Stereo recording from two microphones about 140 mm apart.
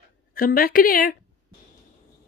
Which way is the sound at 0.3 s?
90° left.